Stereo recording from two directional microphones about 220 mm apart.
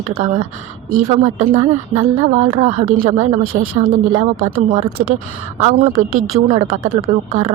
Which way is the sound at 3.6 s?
45° right (ahead or behind).